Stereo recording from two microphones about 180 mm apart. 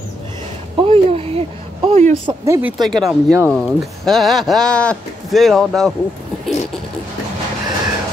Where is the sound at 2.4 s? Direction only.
15° right (ahead or behind).